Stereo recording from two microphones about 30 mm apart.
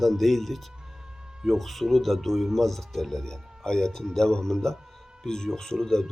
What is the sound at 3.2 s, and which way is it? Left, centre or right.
A man's voice, left.